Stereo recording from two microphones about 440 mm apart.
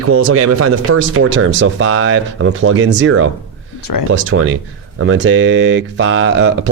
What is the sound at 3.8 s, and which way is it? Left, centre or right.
Speech, left.